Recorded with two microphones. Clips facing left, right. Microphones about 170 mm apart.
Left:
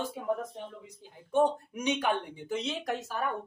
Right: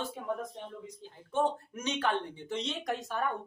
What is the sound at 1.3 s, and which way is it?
Speech, 15° left (ahead or behind).